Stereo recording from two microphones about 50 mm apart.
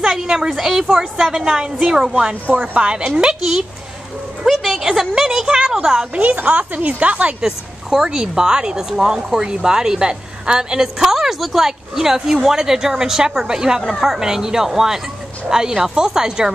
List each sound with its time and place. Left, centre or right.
0.1 s a woman's voice: centre
3.3 s a woman's voice: centre
6.1 s a woman's voice: right
7.4 s speech: centre